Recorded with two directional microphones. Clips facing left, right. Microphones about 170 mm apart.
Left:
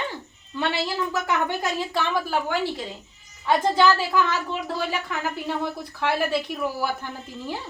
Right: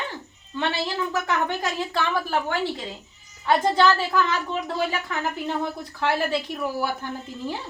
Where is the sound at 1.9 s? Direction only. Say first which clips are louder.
Even; 15° left (ahead or behind).